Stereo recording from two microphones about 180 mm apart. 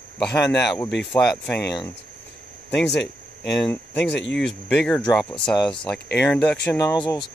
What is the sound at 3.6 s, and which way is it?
Speech, 5° left (ahead or behind).